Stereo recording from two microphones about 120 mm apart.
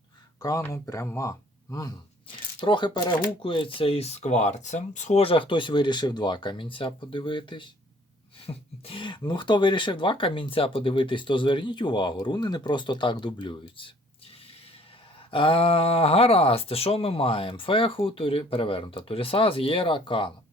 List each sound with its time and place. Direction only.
0.7 s speech: 25° left (ahead or behind)
2.6 s speech: 40° left (ahead or behind)
15.3 s speech: 45° left (ahead or behind)